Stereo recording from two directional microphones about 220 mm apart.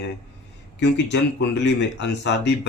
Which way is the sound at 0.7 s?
55° left (ahead or behind).